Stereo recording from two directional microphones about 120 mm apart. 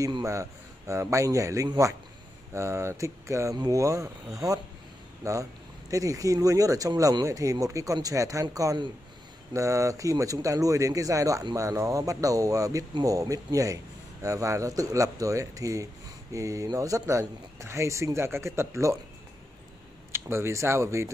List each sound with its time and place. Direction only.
0.0 s speech: 25° right (ahead or behind)
20.1 s speech: 20° right (ahead or behind)